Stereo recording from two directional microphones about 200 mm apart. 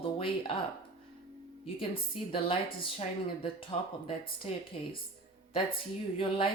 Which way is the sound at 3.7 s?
30° left (ahead or behind).